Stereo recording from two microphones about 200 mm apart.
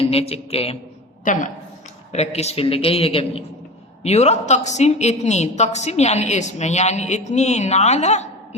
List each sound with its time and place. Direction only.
0.0 s a man's voice: 30° left (ahead or behind)
1.2 s a woman's voice: 40° left (ahead or behind)